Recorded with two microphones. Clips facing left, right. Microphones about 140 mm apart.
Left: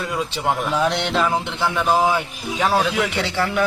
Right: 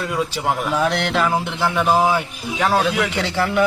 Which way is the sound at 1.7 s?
10° right (ahead or behind).